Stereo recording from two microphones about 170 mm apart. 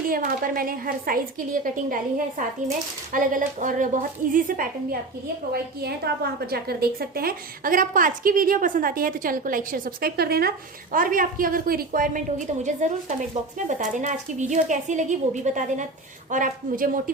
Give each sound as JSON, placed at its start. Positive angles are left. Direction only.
{"t": 0.1, "sound": "a woman's voice", "side_deg": -60}
{"t": 5.8, "sound": "a woman's voice", "side_deg": -70}
{"t": 10.9, "sound": "a woman's voice", "side_deg": -55}